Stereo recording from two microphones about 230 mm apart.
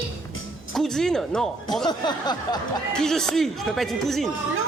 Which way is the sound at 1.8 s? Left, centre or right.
Centre.